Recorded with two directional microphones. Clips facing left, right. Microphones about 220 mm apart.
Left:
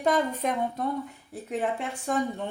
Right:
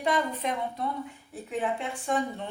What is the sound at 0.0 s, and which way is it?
Speech, 45° left (ahead or behind).